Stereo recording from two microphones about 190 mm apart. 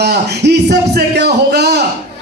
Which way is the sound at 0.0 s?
60° right (ahead or behind).